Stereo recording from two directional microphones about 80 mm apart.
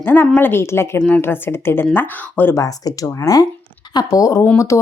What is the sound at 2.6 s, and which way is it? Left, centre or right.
A woman's voice, left.